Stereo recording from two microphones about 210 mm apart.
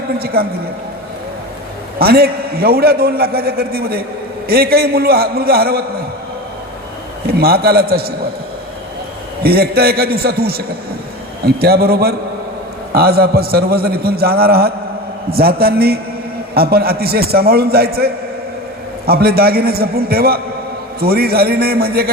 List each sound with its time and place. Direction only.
0.2 s a man's voice: 50° right (ahead or behind)
2.0 s a man's voice: 45° right (ahead or behind)
7.3 s a man's voice: 45° right (ahead or behind)
9.4 s a man's voice: 45° right (ahead or behind)